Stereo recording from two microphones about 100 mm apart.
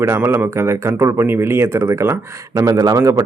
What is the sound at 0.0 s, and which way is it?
Speech, 25° right (ahead or behind).